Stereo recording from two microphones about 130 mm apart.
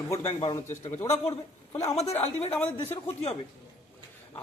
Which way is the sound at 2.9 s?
50° left (ahead or behind).